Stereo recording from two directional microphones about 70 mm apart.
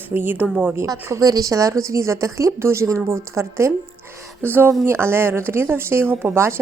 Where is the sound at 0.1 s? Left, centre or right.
Right.